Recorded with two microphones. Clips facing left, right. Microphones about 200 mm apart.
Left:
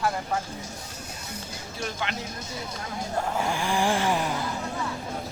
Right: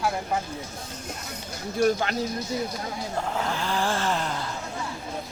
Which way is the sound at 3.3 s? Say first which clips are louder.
Left 2 dB; 15° left (ahead or behind).